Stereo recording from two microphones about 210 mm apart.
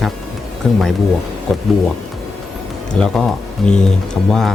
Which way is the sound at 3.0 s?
5° left (ahead or behind).